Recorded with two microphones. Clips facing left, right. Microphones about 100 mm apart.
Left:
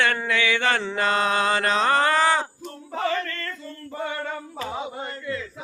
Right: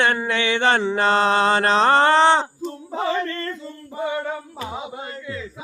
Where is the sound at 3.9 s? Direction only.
15° right (ahead or behind).